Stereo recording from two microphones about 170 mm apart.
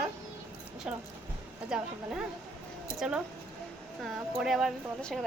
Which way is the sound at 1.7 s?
5° right (ahead or behind).